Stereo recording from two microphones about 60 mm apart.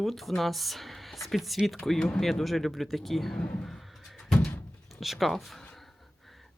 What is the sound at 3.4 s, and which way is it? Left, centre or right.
Speech, left.